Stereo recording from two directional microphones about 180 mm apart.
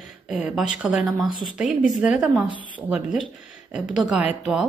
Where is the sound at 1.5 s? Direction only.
Centre (ahead or behind).